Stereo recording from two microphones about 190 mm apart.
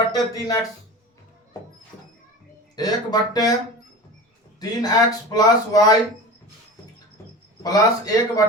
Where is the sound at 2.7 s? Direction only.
20° left (ahead or behind).